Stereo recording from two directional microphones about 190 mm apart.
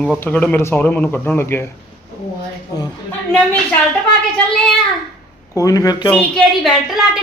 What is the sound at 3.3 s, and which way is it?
Speech, 5° left (ahead or behind).